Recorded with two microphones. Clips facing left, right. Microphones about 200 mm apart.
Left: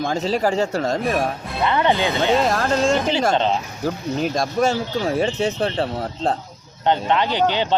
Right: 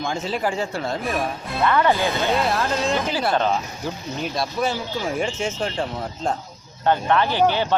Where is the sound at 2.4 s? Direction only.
45° left (ahead or behind).